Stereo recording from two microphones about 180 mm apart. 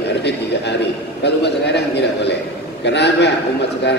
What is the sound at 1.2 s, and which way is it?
A man's voice, 70° left (ahead or behind).